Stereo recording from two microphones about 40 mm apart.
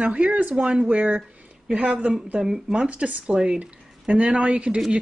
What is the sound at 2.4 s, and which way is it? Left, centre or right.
Speech, centre.